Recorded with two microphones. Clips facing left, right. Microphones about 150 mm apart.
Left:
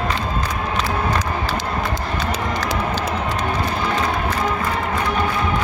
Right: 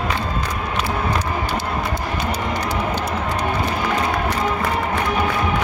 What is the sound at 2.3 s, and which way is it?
Run, 90° left.